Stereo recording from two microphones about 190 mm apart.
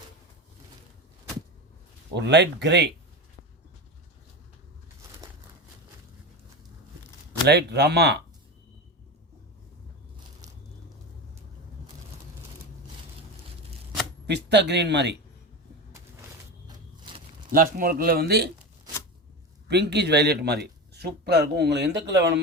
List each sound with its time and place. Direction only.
2.1 s speech: 65° right (ahead or behind)
7.4 s speech: 60° right (ahead or behind)
14.3 s speech: 65° right (ahead or behind)
16.6 s a sound: 25° right (ahead or behind)
17.5 s speech: 45° right (ahead or behind)
19.6 s speech: 60° right (ahead or behind)